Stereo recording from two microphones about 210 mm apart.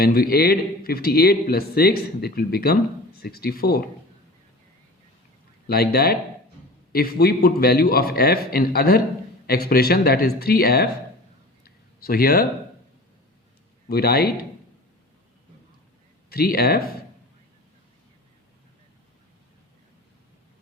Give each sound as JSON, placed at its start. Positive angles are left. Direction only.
{"t": 0.0, "sound": "a man's voice", "side_deg": 45}
{"t": 5.6, "sound": "a man's voice", "side_deg": 45}
{"t": 11.6, "sound": "a sound", "side_deg": 45}
{"t": 13.8, "sound": "a man's voice", "side_deg": 45}
{"t": 16.3, "sound": "a man's voice", "side_deg": 45}